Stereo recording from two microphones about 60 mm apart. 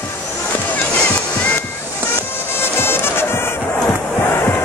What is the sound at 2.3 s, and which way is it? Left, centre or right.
Music, left.